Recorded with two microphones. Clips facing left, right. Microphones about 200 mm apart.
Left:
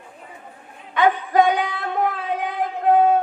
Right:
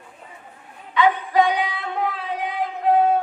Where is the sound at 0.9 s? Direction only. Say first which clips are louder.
Left 1 dB; 50° left (ahead or behind).